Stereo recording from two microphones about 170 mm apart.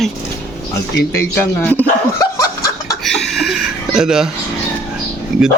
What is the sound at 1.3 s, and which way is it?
Speech, 10° left (ahead or behind).